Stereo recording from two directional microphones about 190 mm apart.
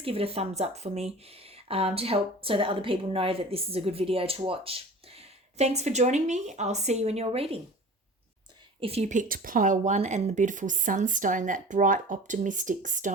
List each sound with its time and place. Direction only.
0.0 s speech: 30° right (ahead or behind)
8.8 s speech: 35° right (ahead or behind)